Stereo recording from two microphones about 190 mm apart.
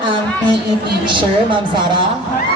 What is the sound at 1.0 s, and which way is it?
Speech, 25° right (ahead or behind).